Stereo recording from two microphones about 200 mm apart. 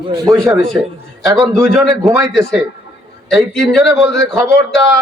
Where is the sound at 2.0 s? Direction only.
Centre (ahead or behind).